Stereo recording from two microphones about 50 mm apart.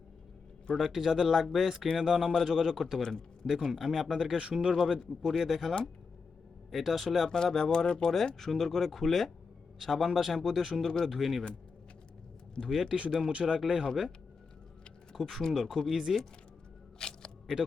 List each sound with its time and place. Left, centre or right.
0.8 s speech: centre
4.4 s speech: centre
4.7 s speech: centre
7.3 s speech: centre
12.5 s speech: centre
13.5 s speech: centre
15.1 s speech: centre
17.0 s single-lens reflex camera: centre